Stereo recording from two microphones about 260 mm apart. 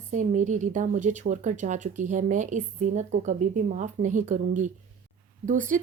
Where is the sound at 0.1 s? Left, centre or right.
Right.